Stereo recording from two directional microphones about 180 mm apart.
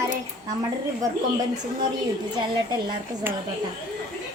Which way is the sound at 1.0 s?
20° right (ahead or behind).